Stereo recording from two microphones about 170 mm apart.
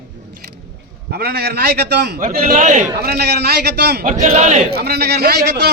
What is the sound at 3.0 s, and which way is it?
A man's voice, 65° right (ahead or behind).